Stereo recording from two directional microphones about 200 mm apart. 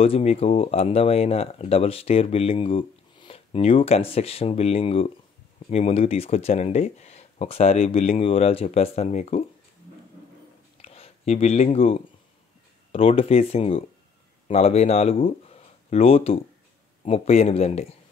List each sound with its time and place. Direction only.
0.0 s speech: 30° left (ahead or behind)
10.8 s a sound: 30° left (ahead or behind)
12.9 s speech: 30° left (ahead or behind)